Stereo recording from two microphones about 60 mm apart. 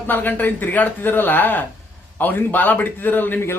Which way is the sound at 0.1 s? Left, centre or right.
Left.